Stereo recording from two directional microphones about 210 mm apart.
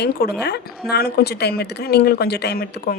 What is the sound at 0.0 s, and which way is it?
Speech, 50° left (ahead or behind).